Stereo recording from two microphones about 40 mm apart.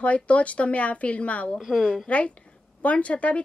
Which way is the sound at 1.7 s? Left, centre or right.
Centre.